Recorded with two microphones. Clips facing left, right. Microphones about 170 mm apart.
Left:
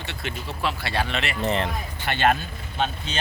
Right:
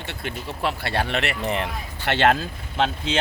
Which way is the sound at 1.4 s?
15° right (ahead or behind).